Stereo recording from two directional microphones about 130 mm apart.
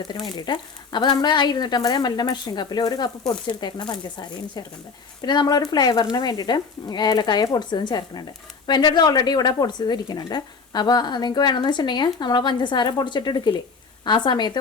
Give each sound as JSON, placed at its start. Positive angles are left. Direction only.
{"t": 0.1, "sound": "speech", "side_deg": 35}
{"t": 5.2, "sound": "speech", "side_deg": 35}